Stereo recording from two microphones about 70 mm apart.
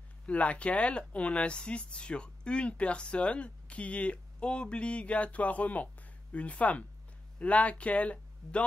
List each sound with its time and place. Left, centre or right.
0.3 s speech: centre